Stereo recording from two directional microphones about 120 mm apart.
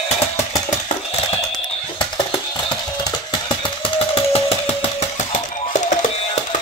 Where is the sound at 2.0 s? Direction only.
35° left (ahead or behind).